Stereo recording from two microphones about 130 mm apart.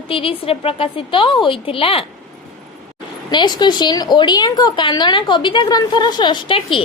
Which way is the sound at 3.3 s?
35° left (ahead or behind).